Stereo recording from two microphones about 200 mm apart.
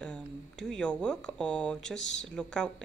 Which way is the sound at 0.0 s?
5° left (ahead or behind).